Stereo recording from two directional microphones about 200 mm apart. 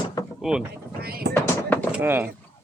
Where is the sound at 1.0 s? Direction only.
50° right (ahead or behind).